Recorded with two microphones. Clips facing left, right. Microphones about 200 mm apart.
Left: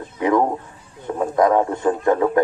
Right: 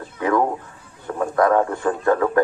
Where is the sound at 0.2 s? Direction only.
20° left (ahead or behind).